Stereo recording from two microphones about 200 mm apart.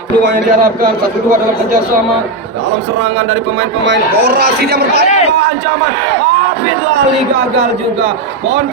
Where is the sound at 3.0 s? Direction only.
65° right (ahead or behind).